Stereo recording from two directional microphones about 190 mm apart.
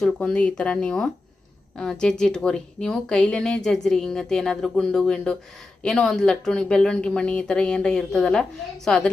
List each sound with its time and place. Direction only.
0.0 s a woman's voice: 5° left (ahead or behind)